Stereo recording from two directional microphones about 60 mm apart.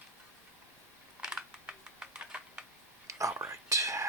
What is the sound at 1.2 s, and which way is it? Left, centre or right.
Computer keyboard, centre.